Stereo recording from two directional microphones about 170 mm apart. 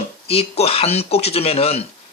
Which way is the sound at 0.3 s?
35° left (ahead or behind).